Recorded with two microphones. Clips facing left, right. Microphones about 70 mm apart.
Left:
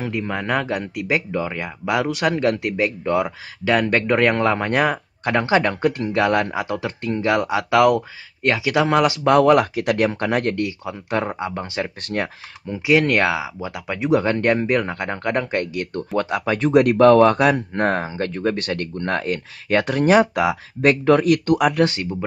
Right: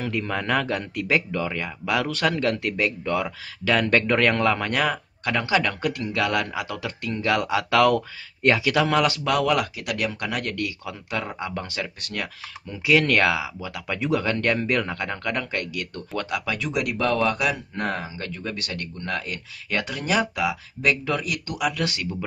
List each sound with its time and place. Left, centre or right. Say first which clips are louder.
0.0 s speech: left 2 dB; centre
9.2 s speech: left 8 dB; left